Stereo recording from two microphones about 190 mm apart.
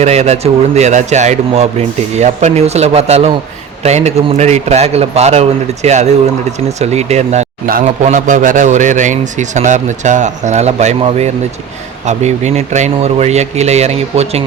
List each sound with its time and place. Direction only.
0.0 s a man's voice: 35° right (ahead or behind)